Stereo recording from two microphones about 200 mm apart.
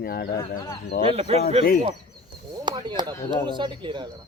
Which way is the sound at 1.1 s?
30° right (ahead or behind).